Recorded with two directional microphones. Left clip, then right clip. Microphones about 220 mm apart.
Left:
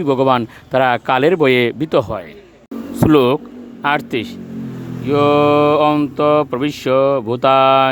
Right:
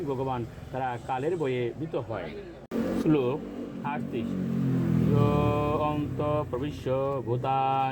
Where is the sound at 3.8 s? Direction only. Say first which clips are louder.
Left 17 dB; 60° left (ahead or behind).